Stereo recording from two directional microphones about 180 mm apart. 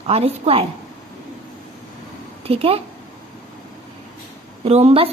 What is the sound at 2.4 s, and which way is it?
Speech, 35° right (ahead or behind).